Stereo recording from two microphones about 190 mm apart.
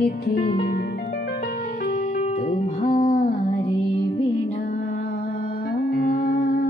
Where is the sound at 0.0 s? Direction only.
55° left (ahead or behind).